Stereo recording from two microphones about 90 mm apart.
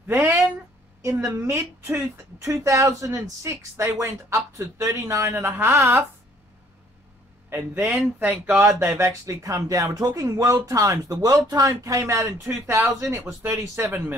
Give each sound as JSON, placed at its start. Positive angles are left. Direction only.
{"t": 0.1, "sound": "a sound", "side_deg": -25}
{"t": 1.3, "sound": "speech", "side_deg": -35}
{"t": 7.4, "sound": "speech", "side_deg": -25}
{"t": 8.6, "sound": "speech", "side_deg": -30}
{"t": 13.8, "sound": "speech", "side_deg": -15}